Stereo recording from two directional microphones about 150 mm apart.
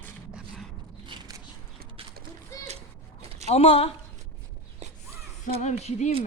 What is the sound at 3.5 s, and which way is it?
Speech, 40° left (ahead or behind).